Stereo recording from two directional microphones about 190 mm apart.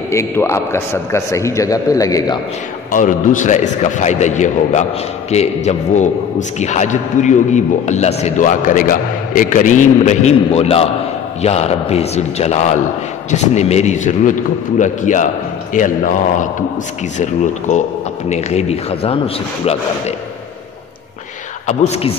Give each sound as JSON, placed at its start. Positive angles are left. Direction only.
{"t": 0.1, "sound": "a man's voice", "side_deg": 15}
{"t": 2.9, "sound": "a man's voice", "side_deg": 45}
{"t": 21.6, "sound": "a man's voice", "side_deg": 35}